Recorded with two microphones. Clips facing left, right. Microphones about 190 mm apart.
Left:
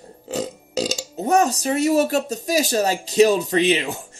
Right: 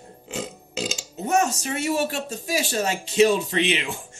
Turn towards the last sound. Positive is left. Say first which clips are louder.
# left 5 dB
turn(degrees=40)  # may be behind; listen again after turning